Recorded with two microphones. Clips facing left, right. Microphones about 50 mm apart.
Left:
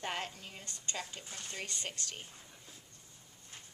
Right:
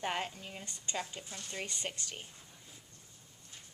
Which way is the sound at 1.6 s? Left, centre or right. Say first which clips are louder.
Right 1 dB; centre.